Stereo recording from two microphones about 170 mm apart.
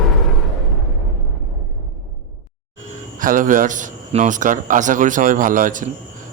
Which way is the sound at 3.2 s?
50° right (ahead or behind).